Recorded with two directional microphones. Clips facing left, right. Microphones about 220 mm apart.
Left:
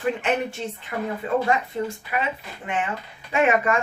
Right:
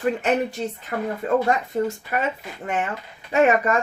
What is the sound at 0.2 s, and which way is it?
A woman's voice, 40° right (ahead or behind).